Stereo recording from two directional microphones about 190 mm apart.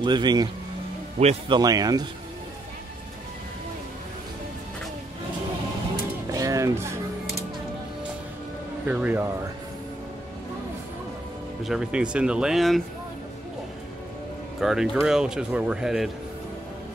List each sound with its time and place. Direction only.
0.0 s speech: 25° right (ahead or behind)
1.2 s speech: 35° right (ahead or behind)
1.5 s speech: 20° right (ahead or behind)
6.3 s music: 15° right (ahead or behind)
8.8 s speech: 10° right (ahead or behind)
11.6 s speech: 5° right (ahead or behind)
14.6 s speech: centre (ahead or behind)